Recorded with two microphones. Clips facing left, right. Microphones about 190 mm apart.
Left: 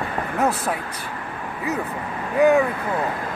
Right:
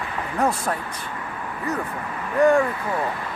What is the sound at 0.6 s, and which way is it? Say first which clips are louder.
Speech: left 1 dB; 10° left (ahead or behind).